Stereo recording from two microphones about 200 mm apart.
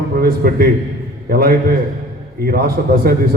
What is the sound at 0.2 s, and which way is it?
A man's voice, 50° right (ahead or behind).